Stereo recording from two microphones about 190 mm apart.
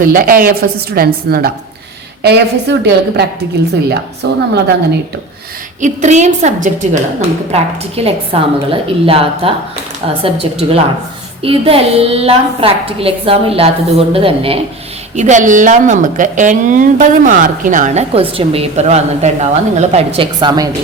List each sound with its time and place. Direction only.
0.0 s a woman's voice: 50° right (ahead or behind)
5.8 s a woman's voice: 40° right (ahead or behind)